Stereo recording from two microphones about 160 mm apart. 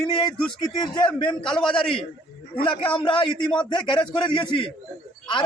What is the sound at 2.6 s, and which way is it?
A man's voice, 35° left (ahead or behind).